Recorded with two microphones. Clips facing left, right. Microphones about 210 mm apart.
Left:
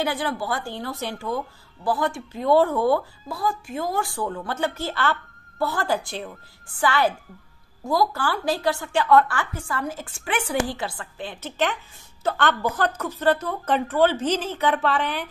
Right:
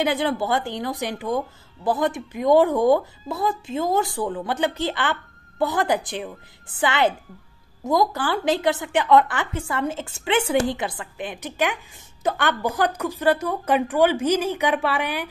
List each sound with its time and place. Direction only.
0.0 s a woman's voice: 20° right (ahead or behind)